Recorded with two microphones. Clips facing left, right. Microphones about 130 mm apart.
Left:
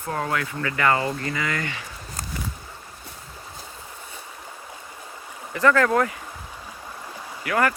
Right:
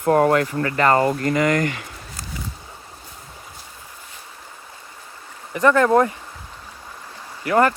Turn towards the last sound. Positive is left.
turn(degrees=-30)  # may be behind; listen again after turning